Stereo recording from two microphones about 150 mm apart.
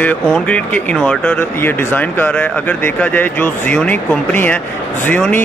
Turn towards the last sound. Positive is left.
turn(degrees=10)  # may be behind; listen again after turning